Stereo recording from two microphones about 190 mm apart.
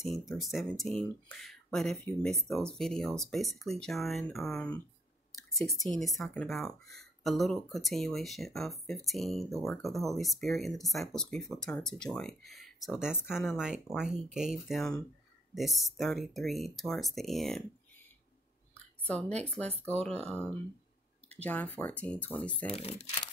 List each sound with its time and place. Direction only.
0.3 s speech: centre (ahead or behind)
19.0 s speech: 5° left (ahead or behind)
22.7 s speech: 35° left (ahead or behind)